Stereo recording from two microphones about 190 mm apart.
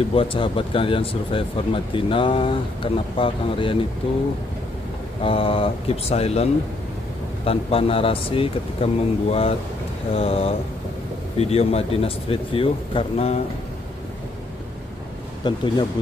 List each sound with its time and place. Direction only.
0.1 s speech: 30° left (ahead or behind)
5.2 s speech: 30° left (ahead or behind)
15.4 s speech: 20° left (ahead or behind)